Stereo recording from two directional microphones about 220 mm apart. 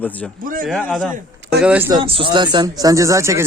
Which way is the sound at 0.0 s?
5° left (ahead or behind).